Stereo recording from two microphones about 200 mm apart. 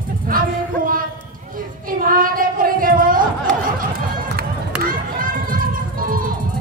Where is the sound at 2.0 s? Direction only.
45° right (ahead or behind).